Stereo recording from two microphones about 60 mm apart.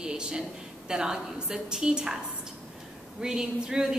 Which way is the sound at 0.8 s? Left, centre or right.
Centre.